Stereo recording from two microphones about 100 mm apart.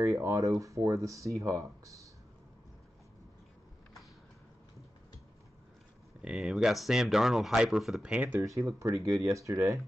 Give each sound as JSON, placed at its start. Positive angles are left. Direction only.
{"t": 0.1, "sound": "speech", "side_deg": -30}
{"t": 6.2, "sound": "speech", "side_deg": -5}
{"t": 8.4, "sound": "speech", "side_deg": -30}